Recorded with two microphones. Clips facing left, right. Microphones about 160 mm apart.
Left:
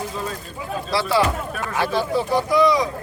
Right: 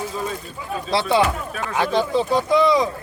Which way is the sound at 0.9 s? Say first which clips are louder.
Right 2 dB; 20° right (ahead or behind).